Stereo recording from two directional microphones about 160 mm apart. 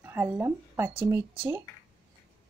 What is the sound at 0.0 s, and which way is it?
Speech, 15° right (ahead or behind).